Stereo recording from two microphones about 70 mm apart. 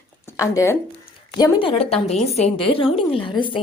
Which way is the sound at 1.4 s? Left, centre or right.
Left.